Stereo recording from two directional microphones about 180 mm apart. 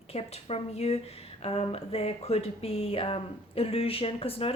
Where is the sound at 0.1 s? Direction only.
35° left (ahead or behind).